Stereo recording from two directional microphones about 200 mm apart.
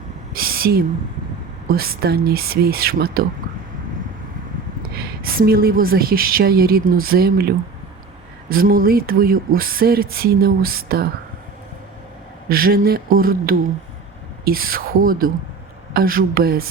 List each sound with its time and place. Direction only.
0.3 s speech: 45° right (ahead or behind)
4.9 s speech: 50° right (ahead or behind)
12.5 s speech: 45° right (ahead or behind)